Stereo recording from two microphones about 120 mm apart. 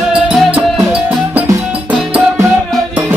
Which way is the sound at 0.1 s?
5° right (ahead or behind).